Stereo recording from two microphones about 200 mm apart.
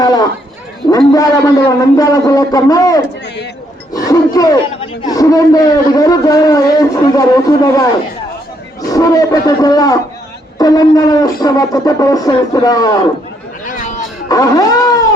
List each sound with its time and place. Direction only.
0.0 s bow-wow: 20° left (ahead or behind)
0.9 s a man's voice: 20° left (ahead or behind)
8.9 s a man's voice: 20° left (ahead or behind)
10.6 s a sound: 20° left (ahead or behind)
13.7 s a sound: 40° left (ahead or behind)
14.3 s a man's voice: 15° left (ahead or behind)